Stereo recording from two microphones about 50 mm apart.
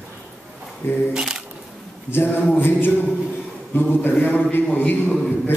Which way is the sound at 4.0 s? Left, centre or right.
Left.